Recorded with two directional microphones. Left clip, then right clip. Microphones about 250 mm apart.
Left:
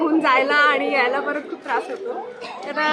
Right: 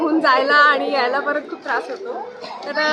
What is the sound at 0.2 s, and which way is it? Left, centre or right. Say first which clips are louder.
A woman's voice: right 4 dB; centre.